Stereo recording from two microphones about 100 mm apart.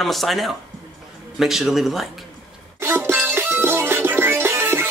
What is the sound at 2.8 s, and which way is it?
Music, 20° right (ahead or behind).